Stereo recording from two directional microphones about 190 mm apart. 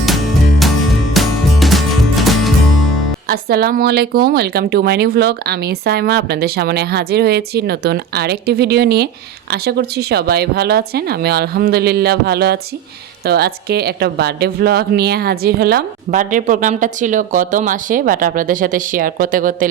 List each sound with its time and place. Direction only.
1.1 s music: centre (ahead or behind)
3.2 s a woman's voice: 55° right (ahead or behind)